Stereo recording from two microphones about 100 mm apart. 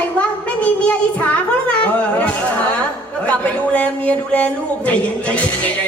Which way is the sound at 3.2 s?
15° left (ahead or behind).